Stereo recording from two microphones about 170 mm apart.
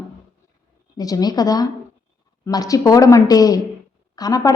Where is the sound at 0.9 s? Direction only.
20° left (ahead or behind).